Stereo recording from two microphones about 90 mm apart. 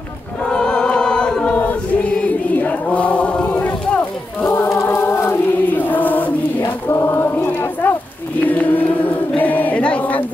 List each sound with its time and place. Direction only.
0.5 s choir: 10° left (ahead or behind)
2.1 s chant: 15° left (ahead or behind)
4.5 s choir: 35° left (ahead or behind)
6.9 s a sound: 25° left (ahead or behind)
8.5 s choir: 20° left (ahead or behind)
9.3 s a sound: 20° left (ahead or behind)